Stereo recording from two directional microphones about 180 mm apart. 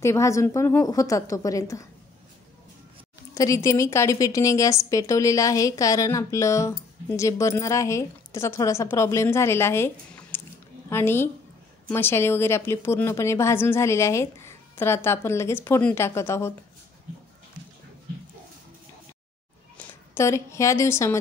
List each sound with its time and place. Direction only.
0.0 s a woman's voice: 15° left (ahead or behind)
3.3 s a woman's voice: 15° left (ahead or behind)
20.2 s a woman's voice: 15° left (ahead or behind)